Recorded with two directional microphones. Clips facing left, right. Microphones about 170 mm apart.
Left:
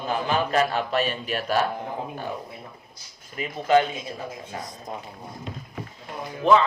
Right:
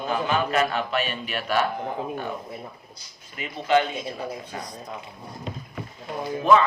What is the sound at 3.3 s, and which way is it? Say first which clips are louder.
Speech: left 2 dB; 35° left (ahead or behind).